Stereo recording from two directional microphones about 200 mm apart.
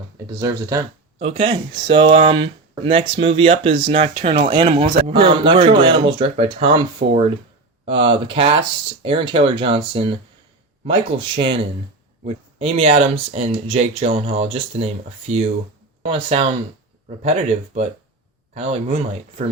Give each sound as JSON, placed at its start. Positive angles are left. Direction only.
{"t": 0.3, "sound": "speech", "side_deg": -20}
{"t": 1.2, "sound": "speech", "side_deg": -30}